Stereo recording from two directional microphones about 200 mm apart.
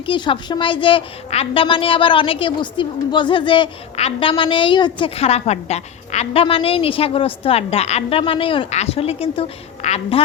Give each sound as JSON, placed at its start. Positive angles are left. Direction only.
{"t": 0.0, "sound": "a woman's voice", "side_deg": 25}